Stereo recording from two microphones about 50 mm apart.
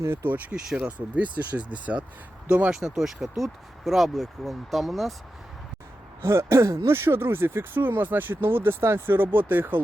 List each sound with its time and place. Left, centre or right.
0.0 s speech: right
0.9 s speech: right
2.7 s speech: centre
6.2 s speech: right